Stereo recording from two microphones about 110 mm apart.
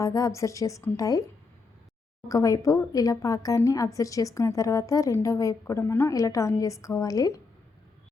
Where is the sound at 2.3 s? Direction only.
30° left (ahead or behind).